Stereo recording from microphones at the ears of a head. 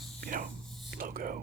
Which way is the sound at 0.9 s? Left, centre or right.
Right.